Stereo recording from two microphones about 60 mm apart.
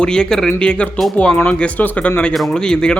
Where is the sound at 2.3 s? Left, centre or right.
Centre.